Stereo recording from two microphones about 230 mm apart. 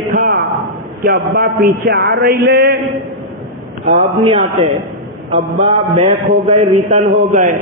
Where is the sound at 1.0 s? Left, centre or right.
Right.